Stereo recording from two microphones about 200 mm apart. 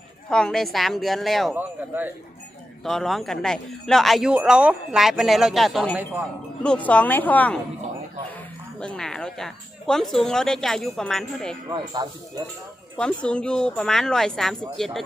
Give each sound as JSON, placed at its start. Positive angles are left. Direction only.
{"t": 0.3, "sound": "speech", "side_deg": 5}
{"t": 1.5, "sound": "a man's voice", "side_deg": -10}
{"t": 2.8, "sound": "a woman's voice", "side_deg": 0}
{"t": 8.8, "sound": "speech", "side_deg": 5}
{"t": 12.0, "sound": "speech", "side_deg": -20}
{"t": 13.0, "sound": "speech", "side_deg": 5}